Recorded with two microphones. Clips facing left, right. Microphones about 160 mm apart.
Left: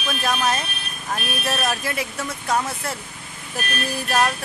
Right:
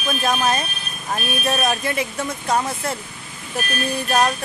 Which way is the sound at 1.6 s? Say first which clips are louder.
Right 3 dB; centre (ahead or behind).